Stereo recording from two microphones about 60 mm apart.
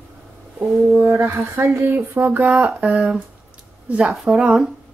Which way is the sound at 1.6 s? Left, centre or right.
Right.